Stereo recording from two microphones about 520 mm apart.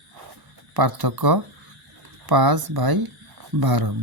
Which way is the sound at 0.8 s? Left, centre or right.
Right.